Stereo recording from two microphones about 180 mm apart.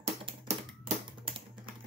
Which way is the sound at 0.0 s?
30° right (ahead or behind).